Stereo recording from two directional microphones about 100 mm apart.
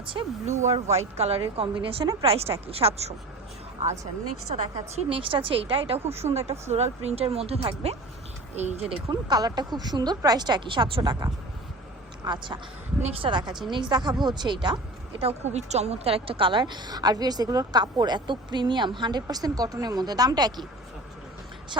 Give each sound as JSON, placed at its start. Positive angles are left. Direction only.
{"t": 0.0, "sound": "speech", "side_deg": -60}
{"t": 0.7, "sound": "speech", "side_deg": -90}
{"t": 2.2, "sound": "speech", "side_deg": -80}
{"t": 4.9, "sound": "speech", "side_deg": -65}
{"t": 6.3, "sound": "speech", "side_deg": -90}
{"t": 9.0, "sound": "a woman's voice", "side_deg": -45}
{"t": 12.2, "sound": "a woman's voice", "side_deg": -50}
{"t": 13.0, "sound": "speech", "side_deg": -90}
{"t": 13.3, "sound": "a woman's voice", "side_deg": -45}
{"t": 15.2, "sound": "a woman's voice", "side_deg": -90}